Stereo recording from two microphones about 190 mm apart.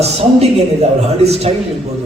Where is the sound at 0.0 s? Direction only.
35° right (ahead or behind).